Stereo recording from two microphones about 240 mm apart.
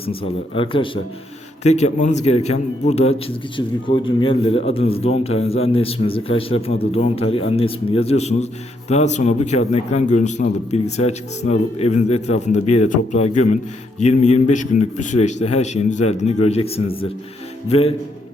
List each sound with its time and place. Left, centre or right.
0.0 s a man's voice: left